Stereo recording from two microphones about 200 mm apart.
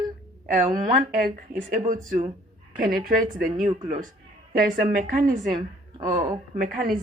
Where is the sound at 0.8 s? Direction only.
45° right (ahead or behind).